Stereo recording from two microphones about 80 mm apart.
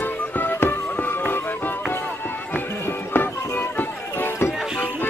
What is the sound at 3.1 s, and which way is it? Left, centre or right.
Music, left.